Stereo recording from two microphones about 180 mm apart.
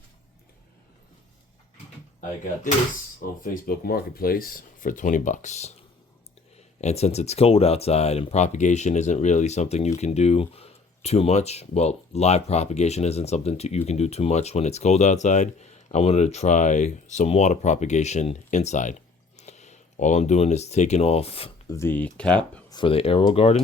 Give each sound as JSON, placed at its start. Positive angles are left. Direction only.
{"t": 3.2, "sound": "speech", "side_deg": 50}
{"t": 6.8, "sound": "speech", "side_deg": 35}
{"t": 21.7, "sound": "speech", "side_deg": 15}
{"t": 22.7, "sound": "speech", "side_deg": 30}